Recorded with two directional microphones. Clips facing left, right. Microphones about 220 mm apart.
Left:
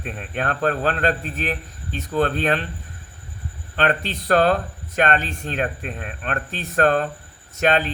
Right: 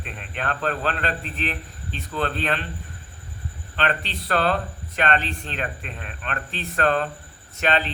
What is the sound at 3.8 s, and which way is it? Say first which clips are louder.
Speech: left 4 dB; 45° left (ahead or behind).